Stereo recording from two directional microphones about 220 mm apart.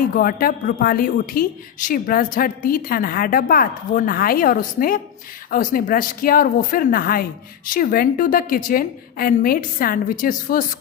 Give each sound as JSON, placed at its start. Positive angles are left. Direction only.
{"t": 0.2, "sound": "speech", "side_deg": 40}